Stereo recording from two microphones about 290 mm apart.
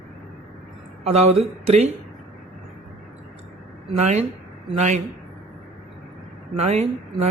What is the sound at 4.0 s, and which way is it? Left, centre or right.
A man's voice, right.